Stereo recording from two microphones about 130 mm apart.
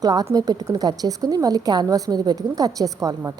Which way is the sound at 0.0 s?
30° right (ahead or behind).